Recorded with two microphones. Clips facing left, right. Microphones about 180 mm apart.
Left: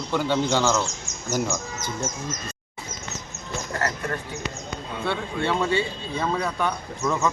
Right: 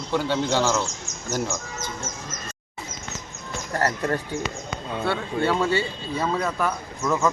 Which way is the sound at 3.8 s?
35° right (ahead or behind).